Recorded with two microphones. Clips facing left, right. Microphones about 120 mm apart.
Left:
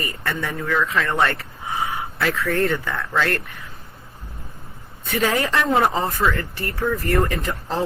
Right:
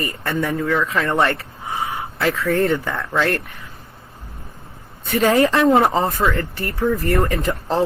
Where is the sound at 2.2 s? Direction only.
25° right (ahead or behind).